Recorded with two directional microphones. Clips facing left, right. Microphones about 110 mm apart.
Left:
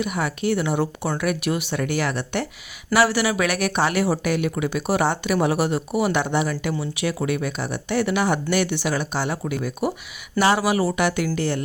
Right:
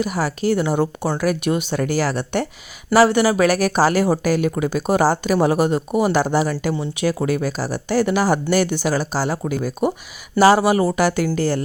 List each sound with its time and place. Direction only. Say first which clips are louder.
0.0 s speech: right 3 dB; 35° right (ahead or behind)